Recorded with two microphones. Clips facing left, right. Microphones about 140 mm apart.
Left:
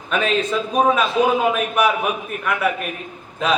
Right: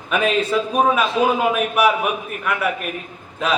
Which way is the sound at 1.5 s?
5° right (ahead or behind).